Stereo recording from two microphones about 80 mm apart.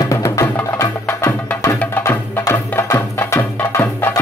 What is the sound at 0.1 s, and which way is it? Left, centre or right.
Music, left.